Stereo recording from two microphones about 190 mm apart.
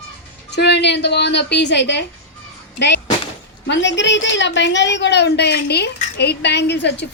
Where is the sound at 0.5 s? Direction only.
65° left (ahead or behind).